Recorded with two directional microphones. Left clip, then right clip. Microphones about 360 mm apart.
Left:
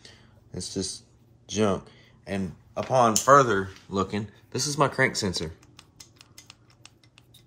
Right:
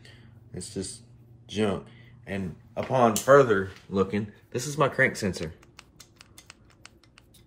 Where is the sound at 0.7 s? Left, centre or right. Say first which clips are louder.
Left 4 dB; left.